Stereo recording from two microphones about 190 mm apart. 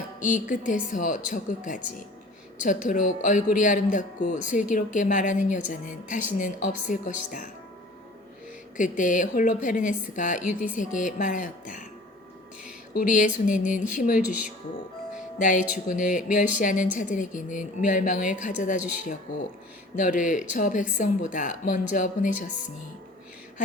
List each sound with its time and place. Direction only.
0.2 s speech: 40° left (ahead or behind)
8.8 s speech: 40° left (ahead or behind)
12.9 s speech: 45° left (ahead or behind)
15.4 s speech: 45° left (ahead or behind)